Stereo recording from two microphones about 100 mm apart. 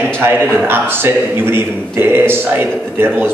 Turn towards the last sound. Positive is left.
turn(degrees=-20)  # may be behind; listen again after turning